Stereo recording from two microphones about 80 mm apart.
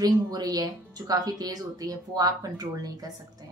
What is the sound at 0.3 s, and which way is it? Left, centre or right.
A woman's voice, right.